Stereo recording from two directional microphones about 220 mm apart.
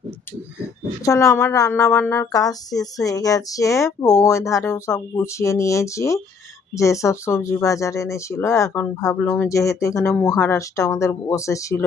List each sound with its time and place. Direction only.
1.0 s speech: 15° left (ahead or behind)